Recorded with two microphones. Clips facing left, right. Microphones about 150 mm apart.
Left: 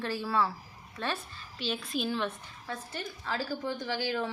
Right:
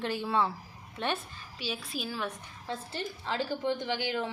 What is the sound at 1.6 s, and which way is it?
Speech, 10° right (ahead or behind).